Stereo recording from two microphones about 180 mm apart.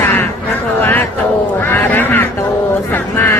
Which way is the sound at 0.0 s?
10° left (ahead or behind).